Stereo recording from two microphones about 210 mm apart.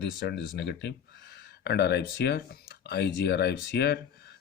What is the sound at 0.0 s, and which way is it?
Speech, 50° left (ahead or behind).